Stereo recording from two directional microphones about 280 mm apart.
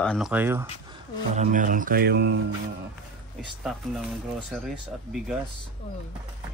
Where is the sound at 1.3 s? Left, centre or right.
Right.